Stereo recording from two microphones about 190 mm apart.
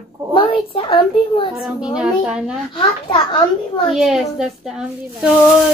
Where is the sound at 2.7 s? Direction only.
25° left (ahead or behind).